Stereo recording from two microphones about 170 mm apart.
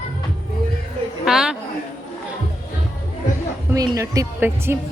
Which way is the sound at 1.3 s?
Centre (ahead or behind).